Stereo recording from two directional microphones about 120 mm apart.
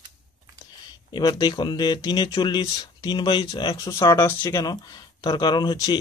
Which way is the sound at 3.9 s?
25° left (ahead or behind).